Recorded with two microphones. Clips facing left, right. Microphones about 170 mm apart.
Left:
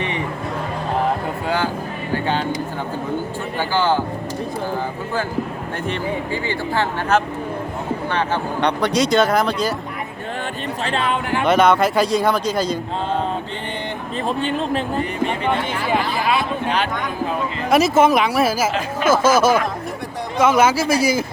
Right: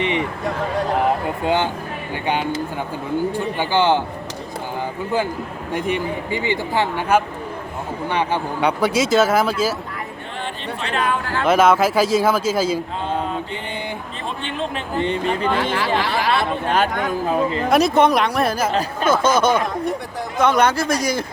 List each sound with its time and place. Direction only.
1.5 s a man's voice: 20° right (ahead or behind)
5.7 s speech: 15° right (ahead or behind)
10.8 s speech: 30° left (ahead or behind)
11.4 s speech: centre (ahead or behind)
14.3 s speech: 40° left (ahead or behind)
16.0 s speech: 80° right
16.6 s speech: 45° right (ahead or behind)
17.7 s speech: centre (ahead or behind)